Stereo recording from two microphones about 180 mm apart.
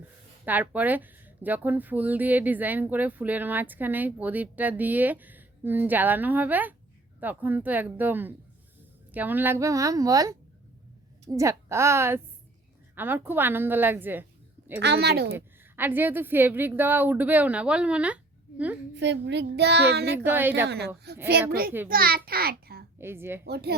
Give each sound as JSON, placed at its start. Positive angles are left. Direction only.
{"t": 0.4, "sound": "speech", "side_deg": -10}
{"t": 14.8, "sound": "speech", "side_deg": -65}
{"t": 15.4, "sound": "speech", "side_deg": -10}
{"t": 18.9, "sound": "a child's voice", "side_deg": -75}
{"t": 20.1, "sound": "speech", "side_deg": -10}
{"t": 20.7, "sound": "speech", "side_deg": -65}
{"t": 21.8, "sound": "a child's voice", "side_deg": -55}
{"t": 23.0, "sound": "speech", "side_deg": -15}
{"t": 23.4, "sound": "speech", "side_deg": -65}